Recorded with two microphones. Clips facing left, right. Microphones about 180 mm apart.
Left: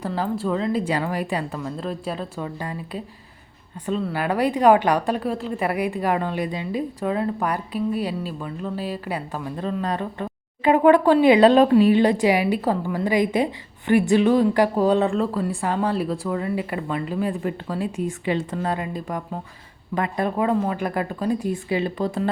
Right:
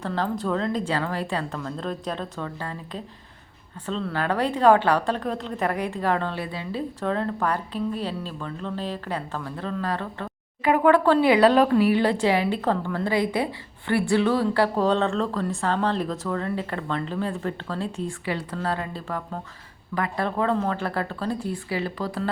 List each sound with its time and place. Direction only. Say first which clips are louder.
0.0 s a woman's voice: left 2 dB; 5° left (ahead or behind)